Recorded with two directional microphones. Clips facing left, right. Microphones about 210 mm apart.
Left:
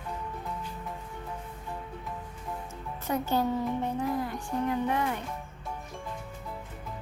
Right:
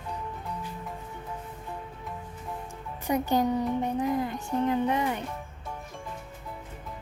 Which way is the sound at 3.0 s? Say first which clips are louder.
Right 3 dB; 15° right (ahead or behind).